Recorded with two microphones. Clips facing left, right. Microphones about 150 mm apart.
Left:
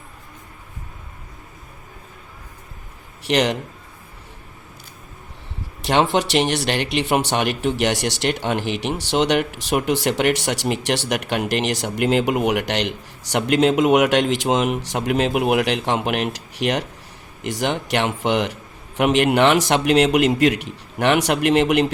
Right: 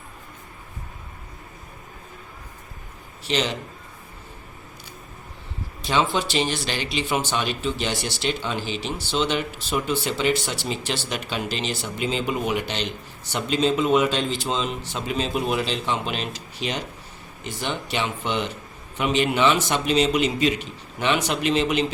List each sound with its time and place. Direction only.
3.2 s speech: 70° left (ahead or behind)
5.8 s speech: 70° left (ahead or behind)